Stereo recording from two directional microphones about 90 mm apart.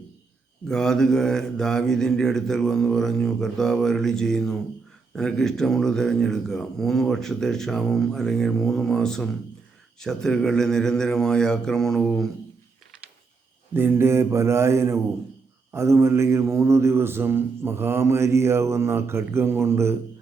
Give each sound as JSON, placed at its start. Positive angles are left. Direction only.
{"t": 0.7, "sound": "speech", "side_deg": 5}
{"t": 13.7, "sound": "a man's voice", "side_deg": -25}